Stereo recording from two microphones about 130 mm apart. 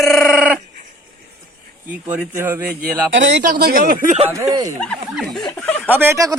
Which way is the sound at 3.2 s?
90° right.